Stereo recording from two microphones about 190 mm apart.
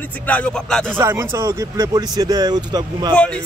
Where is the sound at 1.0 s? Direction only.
15° right (ahead or behind).